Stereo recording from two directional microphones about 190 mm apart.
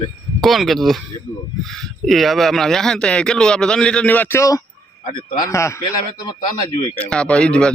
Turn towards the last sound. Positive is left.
turn(degrees=5)  # may be behind; listen again after turning